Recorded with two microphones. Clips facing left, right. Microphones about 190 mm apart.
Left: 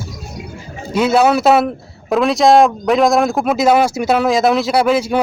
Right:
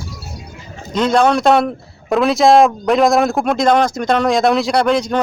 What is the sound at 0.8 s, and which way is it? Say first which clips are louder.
Speech: left 1 dB; 10° left (ahead or behind).